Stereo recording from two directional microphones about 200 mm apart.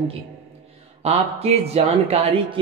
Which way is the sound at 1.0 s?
30° right (ahead or behind).